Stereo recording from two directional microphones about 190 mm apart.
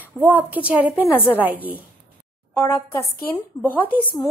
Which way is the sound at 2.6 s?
10° left (ahead or behind).